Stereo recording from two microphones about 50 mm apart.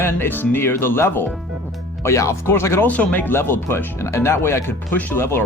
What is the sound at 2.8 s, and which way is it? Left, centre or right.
Speech, left.